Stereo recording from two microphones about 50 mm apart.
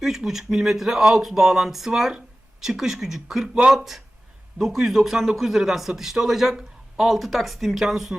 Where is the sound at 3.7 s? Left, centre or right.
Centre.